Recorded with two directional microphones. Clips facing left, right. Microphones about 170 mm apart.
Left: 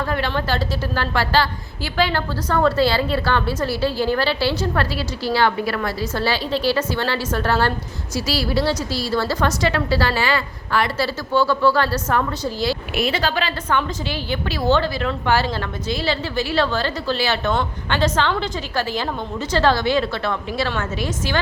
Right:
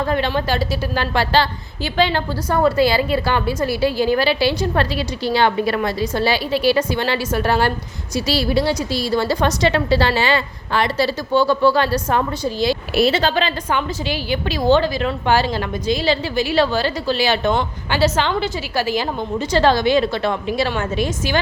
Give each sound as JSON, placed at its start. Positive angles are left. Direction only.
{"t": 0.0, "sound": "a woman's voice", "side_deg": -20}
{"t": 13.0, "sound": "a woman's voice", "side_deg": -30}
{"t": 13.7, "sound": "a woman's voice", "side_deg": -10}